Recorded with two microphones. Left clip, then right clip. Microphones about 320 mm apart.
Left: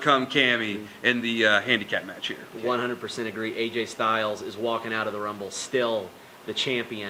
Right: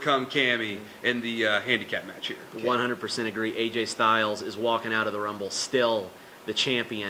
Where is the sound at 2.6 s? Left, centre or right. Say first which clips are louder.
Right 1 dB; right.